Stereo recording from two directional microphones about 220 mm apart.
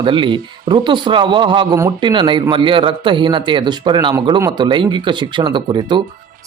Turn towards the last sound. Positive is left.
turn(degrees=-20)  # may be behind; listen again after turning